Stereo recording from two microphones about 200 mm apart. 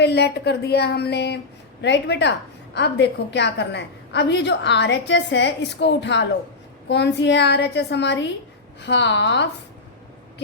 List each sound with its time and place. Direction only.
0.0 s a woman's voice: 55° left (ahead or behind)